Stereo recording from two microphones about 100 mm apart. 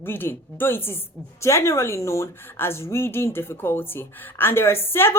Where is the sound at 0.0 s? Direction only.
20° left (ahead or behind).